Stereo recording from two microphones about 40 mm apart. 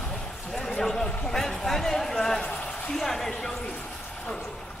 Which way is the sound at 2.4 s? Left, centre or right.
Left.